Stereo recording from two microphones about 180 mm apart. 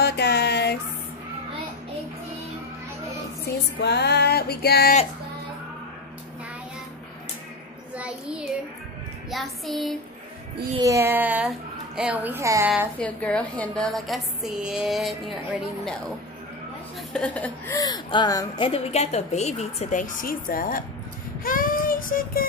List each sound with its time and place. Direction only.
0.0 s a sound: 65° left (ahead or behind)
3.8 s music: 65° left (ahead or behind)
7.9 s child singing: 5° right (ahead or behind)
9.3 s a woman's voice: centre (ahead or behind)
10.8 s speech: 15° right (ahead or behind)
13.0 s a woman's voice: 5° left (ahead or behind)
17.1 s a woman's voice: 5° left (ahead or behind)
17.7 s speech: 20° left (ahead or behind)
18.7 s a woman's voice: 35° left (ahead or behind); by 20.8 s 55° left (ahead or behind)
21.5 s child singing: 50° left (ahead or behind)